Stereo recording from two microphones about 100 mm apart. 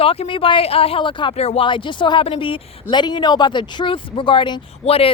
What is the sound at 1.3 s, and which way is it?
Speech, 90° left.